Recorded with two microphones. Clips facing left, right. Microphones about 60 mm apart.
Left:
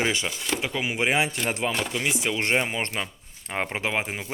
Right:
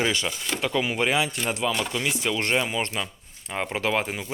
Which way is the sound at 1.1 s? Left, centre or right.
Left.